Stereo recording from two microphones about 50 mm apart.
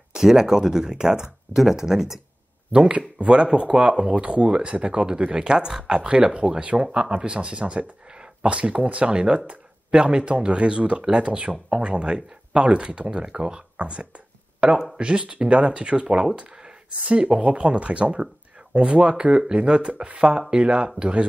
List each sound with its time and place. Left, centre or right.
0.1 s speech: centre
2.7 s speech: right